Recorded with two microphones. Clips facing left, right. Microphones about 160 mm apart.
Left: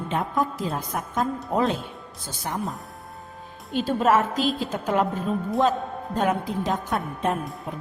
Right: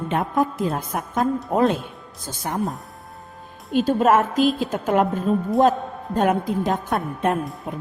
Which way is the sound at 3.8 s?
45° right (ahead or behind).